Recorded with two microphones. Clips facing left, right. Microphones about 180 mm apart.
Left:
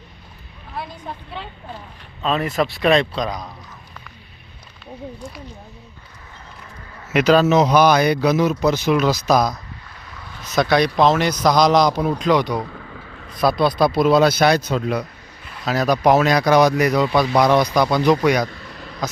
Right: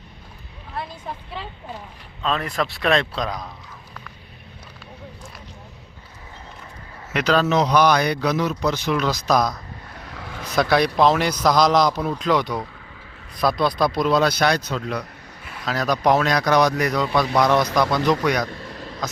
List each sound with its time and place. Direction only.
0.7 s a man's voice: centre (ahead or behind)
7.1 s a man's voice: 10° left (ahead or behind)
10.2 s vehicle: 90° right
10.5 s a man's voice: 5° right (ahead or behind)
18.5 s a sound: 35° right (ahead or behind)